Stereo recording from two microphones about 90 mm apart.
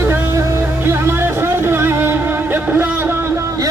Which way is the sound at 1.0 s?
25° right (ahead or behind).